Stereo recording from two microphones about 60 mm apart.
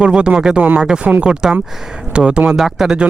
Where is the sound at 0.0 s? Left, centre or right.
Centre.